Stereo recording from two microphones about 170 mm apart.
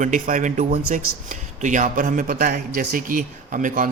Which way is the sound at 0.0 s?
50° right (ahead or behind).